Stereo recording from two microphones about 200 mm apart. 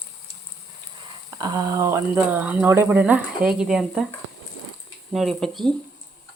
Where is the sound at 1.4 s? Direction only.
20° right (ahead or behind); by 4.0 s 5° right (ahead or behind).